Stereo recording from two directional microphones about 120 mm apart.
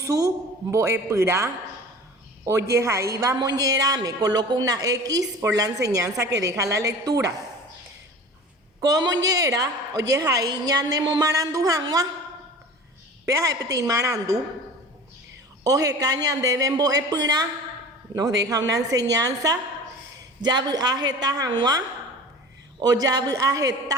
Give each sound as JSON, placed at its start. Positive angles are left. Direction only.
{"t": 0.0, "sound": "a man's voice", "side_deg": -25}
{"t": 8.8, "sound": "a woman's voice", "side_deg": -30}
{"t": 13.2, "sound": "a woman's voice", "side_deg": -30}
{"t": 15.6, "sound": "a woman's voice", "side_deg": -30}
{"t": 22.8, "sound": "a woman's voice", "side_deg": -30}